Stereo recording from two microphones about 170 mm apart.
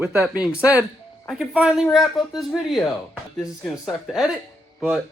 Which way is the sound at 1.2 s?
5° right (ahead or behind).